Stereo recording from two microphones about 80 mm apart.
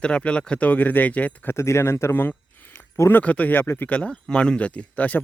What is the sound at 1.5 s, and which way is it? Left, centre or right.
Speech, left.